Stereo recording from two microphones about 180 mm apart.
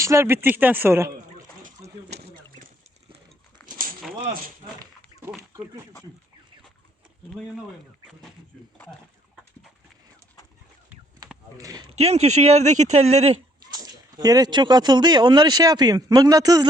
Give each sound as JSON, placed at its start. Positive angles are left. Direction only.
{"t": 0.0, "sound": "speech", "side_deg": -15}
{"t": 11.5, "sound": "speech", "side_deg": -20}
{"t": 11.9, "sound": "speech", "side_deg": -35}
{"t": 13.6, "sound": "speech", "side_deg": -20}